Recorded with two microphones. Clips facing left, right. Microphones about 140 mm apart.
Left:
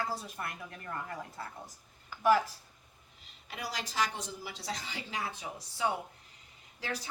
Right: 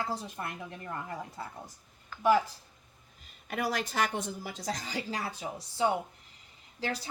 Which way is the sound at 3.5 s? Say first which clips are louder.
Right 8 dB; 50° right (ahead or behind).